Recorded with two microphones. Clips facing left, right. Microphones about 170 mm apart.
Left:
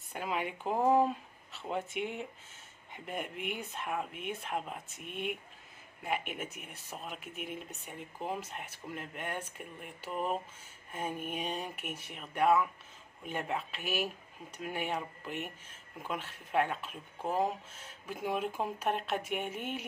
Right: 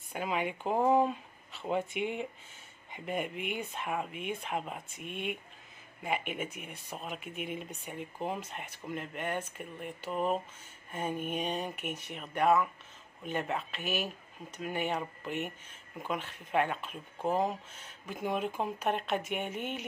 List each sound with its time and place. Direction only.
0.1 s speech: centre (ahead or behind)